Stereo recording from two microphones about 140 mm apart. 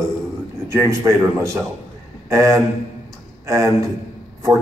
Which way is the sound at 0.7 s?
20° right (ahead or behind).